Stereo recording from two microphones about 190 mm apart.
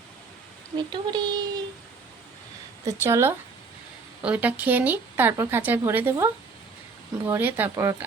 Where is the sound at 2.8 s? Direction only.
15° right (ahead or behind).